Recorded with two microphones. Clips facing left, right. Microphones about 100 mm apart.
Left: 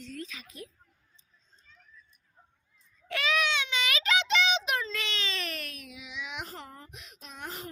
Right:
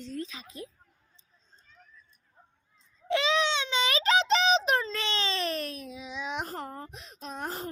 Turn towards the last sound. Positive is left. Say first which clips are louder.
# right 6 dB
turn(degrees=-35)  # may be behind; listen again after turning